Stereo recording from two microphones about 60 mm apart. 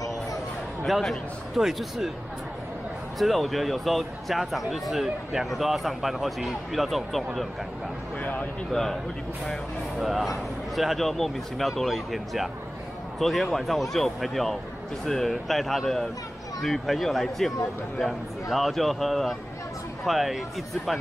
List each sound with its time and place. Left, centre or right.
0.8 s speech: centre
3.2 s speech: centre
8.2 s speech: left
9.9 s speech: centre